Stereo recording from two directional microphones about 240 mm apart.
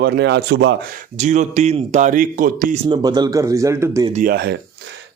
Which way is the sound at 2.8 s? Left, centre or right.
Centre.